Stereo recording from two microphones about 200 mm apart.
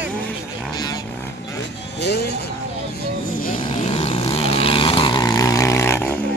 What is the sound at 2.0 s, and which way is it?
Vehicle, 55° left (ahead or behind).